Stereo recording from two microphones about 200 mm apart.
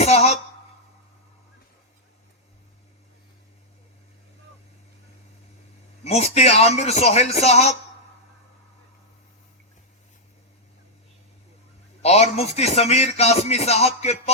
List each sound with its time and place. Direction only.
0.0 s throat clearing: 30° left (ahead or behind)
6.1 s speech: 30° left (ahead or behind)
12.0 s speech: 30° left (ahead or behind)